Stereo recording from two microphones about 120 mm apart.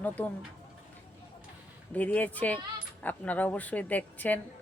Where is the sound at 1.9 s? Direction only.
15° left (ahead or behind).